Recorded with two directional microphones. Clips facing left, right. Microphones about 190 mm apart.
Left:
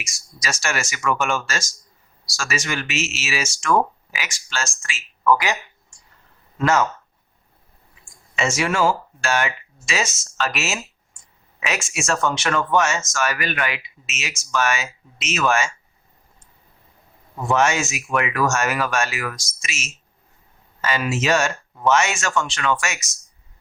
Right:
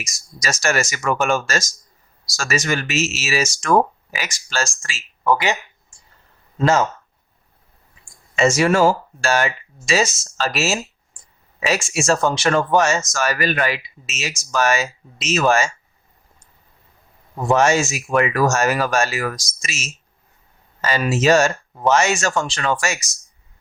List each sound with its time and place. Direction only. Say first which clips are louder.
0.0 s speech: right 3 dB; 40° right (ahead or behind)
6.6 s speech: right 2 dB; 30° right (ahead or behind)
8.4 s speech: right 6 dB; 40° right (ahead or behind)
17.4 s speech: right 4 dB; 35° right (ahead or behind)